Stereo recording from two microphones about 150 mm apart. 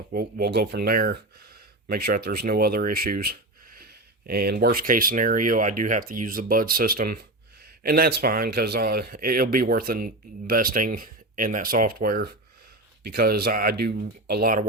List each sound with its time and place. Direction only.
0.1 s speech: 90° right
13.1 s speech: 85° right